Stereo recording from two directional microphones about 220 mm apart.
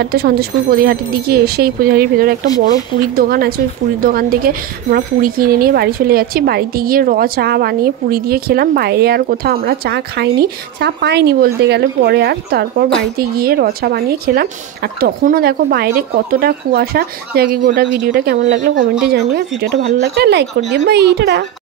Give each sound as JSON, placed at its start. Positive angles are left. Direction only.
{"t": 0.0, "sound": "a woman's voice", "side_deg": -45}